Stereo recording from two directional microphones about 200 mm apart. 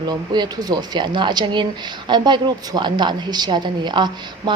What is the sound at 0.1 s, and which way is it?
Speech, 20° right (ahead or behind).